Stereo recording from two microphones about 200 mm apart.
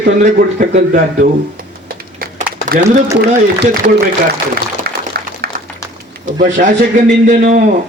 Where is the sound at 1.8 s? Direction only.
45° right (ahead or behind).